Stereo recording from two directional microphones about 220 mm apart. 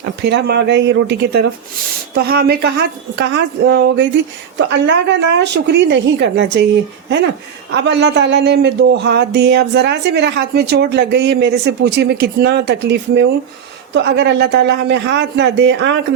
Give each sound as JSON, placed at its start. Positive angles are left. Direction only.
{"t": 0.2, "sound": "speech", "side_deg": -50}
{"t": 7.7, "sound": "speech", "side_deg": -55}